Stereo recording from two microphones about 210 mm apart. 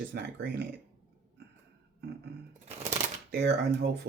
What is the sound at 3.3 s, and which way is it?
Speech, 50° right (ahead or behind).